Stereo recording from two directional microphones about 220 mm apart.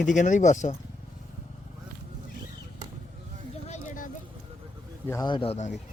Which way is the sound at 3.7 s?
35° left (ahead or behind).